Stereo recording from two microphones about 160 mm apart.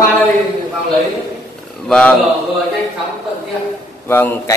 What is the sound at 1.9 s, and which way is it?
Speech, 5° left (ahead or behind).